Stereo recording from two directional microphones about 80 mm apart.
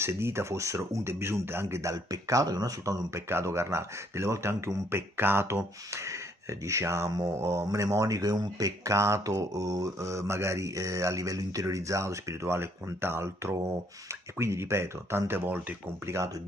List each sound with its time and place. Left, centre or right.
0.0 s speech: right
3.3 s speech: right